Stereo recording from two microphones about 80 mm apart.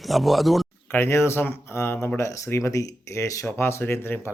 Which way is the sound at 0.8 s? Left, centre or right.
Left.